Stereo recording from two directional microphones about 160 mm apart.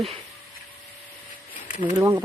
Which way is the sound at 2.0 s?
20° right (ahead or behind).